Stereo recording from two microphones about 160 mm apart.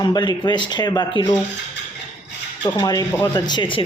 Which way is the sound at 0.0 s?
25° left (ahead or behind).